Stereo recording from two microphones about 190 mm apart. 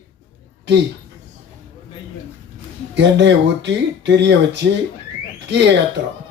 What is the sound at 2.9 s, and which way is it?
Speech, 65° right (ahead or behind).